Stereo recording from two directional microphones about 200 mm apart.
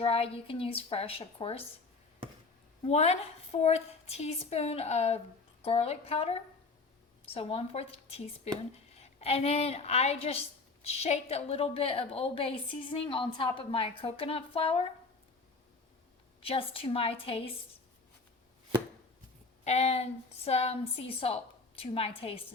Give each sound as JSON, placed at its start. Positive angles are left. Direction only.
{"t": 0.0, "sound": "a woman's voice", "side_deg": 30}
{"t": 2.8, "sound": "a woman's voice", "side_deg": 30}
{"t": 16.4, "sound": "a woman's voice", "side_deg": 25}
{"t": 19.6, "sound": "a woman's voice", "side_deg": 30}